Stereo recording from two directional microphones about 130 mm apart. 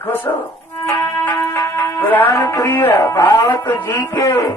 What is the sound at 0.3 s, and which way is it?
Speech, 25° left (ahead or behind).